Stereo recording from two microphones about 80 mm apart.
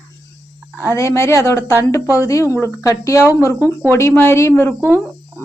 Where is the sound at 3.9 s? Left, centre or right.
Left.